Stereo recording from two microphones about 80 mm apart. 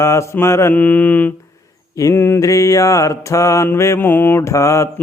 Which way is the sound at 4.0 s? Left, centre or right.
Left.